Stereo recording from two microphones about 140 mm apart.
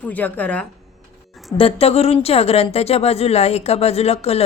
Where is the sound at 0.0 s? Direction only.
10° left (ahead or behind).